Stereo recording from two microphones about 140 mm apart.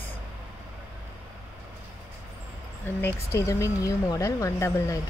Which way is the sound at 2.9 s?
15° left (ahead or behind).